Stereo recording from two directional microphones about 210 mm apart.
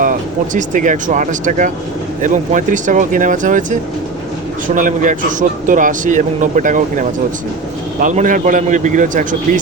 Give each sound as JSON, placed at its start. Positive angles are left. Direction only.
{"t": 0.0, "sound": "speech", "side_deg": -40}